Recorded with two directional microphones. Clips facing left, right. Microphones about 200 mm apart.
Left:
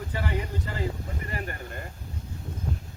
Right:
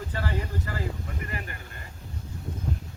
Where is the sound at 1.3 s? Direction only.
40° left (ahead or behind).